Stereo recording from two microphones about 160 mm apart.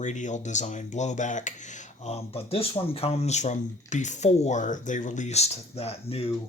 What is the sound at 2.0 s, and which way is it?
Speech, 40° left (ahead or behind).